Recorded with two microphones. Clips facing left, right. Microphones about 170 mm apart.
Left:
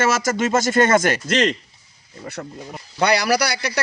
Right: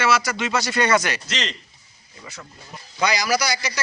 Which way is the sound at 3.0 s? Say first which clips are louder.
Left 4 dB; 60° left (ahead or behind).